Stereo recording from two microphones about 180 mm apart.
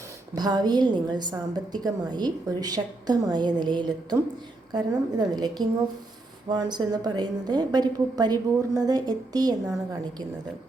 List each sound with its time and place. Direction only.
0.3 s a woman's voice: 25° right (ahead or behind)